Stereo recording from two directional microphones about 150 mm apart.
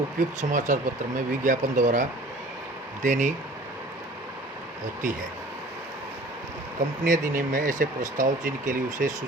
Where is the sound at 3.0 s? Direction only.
55° right (ahead or behind).